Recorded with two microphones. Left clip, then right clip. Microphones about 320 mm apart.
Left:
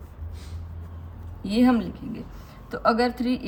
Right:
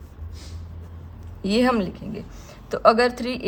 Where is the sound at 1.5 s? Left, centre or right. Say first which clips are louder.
Right 2 dB; right.